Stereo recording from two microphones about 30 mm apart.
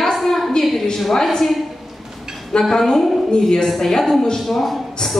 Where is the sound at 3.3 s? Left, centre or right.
Left.